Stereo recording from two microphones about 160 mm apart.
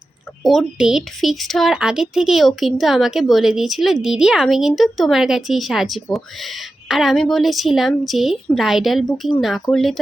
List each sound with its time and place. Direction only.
0.4 s a woman's voice: centre (ahead or behind)